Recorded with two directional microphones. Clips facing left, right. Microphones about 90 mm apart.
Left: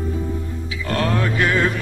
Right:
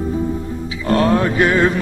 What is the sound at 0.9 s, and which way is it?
Music, 30° right (ahead or behind).